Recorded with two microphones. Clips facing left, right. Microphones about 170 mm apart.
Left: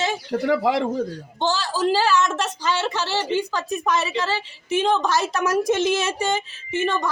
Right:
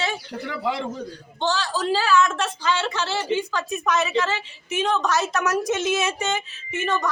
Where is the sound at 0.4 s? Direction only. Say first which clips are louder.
Left 7 dB; 90° left.